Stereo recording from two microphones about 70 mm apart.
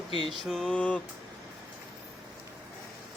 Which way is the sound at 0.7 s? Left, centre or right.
Centre.